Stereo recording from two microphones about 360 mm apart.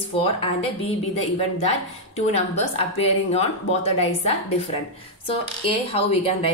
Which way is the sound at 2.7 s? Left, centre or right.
Centre.